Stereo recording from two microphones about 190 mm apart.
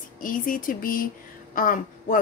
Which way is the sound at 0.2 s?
45° left (ahead or behind).